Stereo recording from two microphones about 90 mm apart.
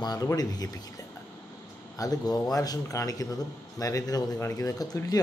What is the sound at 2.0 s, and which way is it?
Speech, 45° left (ahead or behind).